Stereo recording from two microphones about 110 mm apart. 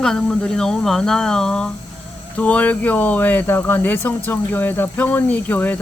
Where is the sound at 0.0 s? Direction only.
5° left (ahead or behind).